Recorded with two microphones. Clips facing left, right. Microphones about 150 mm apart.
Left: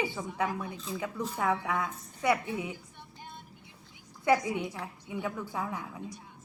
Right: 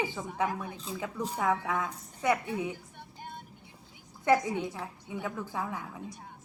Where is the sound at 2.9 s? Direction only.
50° right (ahead or behind).